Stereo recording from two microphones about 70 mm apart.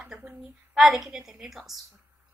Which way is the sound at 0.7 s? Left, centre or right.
Centre.